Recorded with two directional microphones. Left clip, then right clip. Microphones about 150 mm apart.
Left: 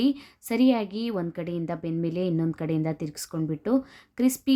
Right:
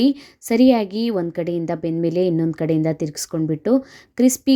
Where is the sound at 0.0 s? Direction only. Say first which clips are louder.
Right 7 dB; 25° right (ahead or behind).